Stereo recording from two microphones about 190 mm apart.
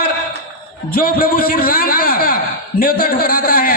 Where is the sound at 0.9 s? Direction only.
50° left (ahead or behind).